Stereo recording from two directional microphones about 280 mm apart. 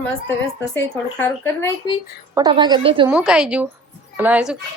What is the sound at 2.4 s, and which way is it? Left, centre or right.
Speech, centre.